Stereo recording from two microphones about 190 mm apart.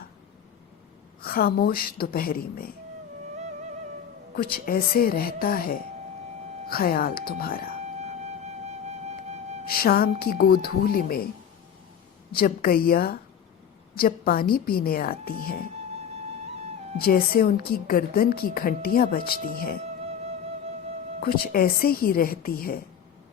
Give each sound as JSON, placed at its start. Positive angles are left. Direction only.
{"t": 1.2, "sound": "a woman's voice", "side_deg": 50}
{"t": 4.4, "sound": "a woman's voice", "side_deg": 50}
{"t": 8.0, "sound": "music", "side_deg": -35}
{"t": 9.6, "sound": "a woman's voice", "side_deg": 50}
{"t": 12.3, "sound": "a woman's voice", "side_deg": 50}
{"t": 17.0, "sound": "a woman's voice", "side_deg": 50}
{"t": 21.2, "sound": "a woman's voice", "side_deg": 55}